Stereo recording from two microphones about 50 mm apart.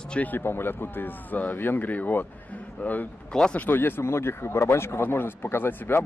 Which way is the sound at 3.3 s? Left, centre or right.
Centre.